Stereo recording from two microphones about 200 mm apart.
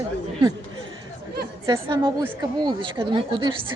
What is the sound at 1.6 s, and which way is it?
Speech, 20° right (ahead or behind).